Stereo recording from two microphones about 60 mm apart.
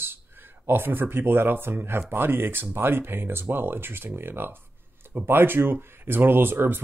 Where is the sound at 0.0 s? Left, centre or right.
Right.